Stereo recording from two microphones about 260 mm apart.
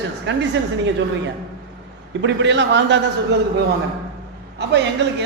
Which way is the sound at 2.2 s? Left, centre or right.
Right.